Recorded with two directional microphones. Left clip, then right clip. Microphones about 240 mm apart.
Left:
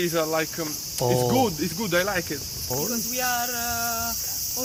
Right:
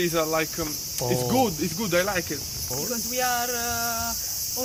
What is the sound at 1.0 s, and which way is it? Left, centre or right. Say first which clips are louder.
Cricket: left 4 dB; left.